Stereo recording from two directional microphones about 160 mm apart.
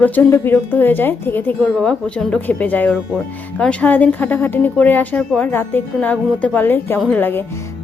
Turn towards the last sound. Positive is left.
turn(degrees=10)  # may be behind; listen again after turning